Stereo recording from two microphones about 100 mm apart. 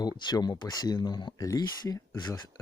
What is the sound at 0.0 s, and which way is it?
Speech, 45° left (ahead or behind).